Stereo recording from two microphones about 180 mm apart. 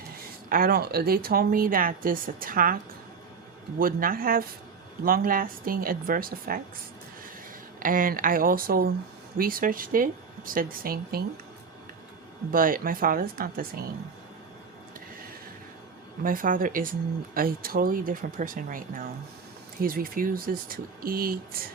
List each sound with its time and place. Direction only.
0.5 s speech: 55° right (ahead or behind)
3.8 s speech: 50° right (ahead or behind)
7.8 s speech: 50° right (ahead or behind)
12.5 s speech: 50° right (ahead or behind)
16.2 s speech: 50° right (ahead or behind)